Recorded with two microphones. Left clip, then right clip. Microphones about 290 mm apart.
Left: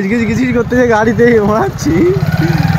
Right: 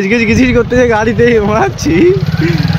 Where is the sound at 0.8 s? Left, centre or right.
Centre.